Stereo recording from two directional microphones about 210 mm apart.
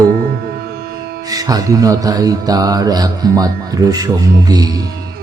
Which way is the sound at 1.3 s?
15° right (ahead or behind).